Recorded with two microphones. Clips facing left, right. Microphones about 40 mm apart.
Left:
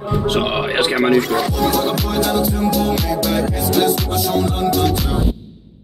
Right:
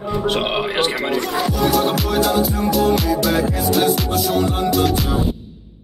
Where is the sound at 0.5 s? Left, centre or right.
Centre.